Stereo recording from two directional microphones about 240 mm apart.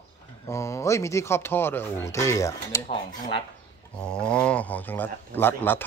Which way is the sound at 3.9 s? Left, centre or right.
Centre.